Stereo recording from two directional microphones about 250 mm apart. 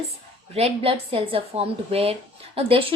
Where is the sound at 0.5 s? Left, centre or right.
Right.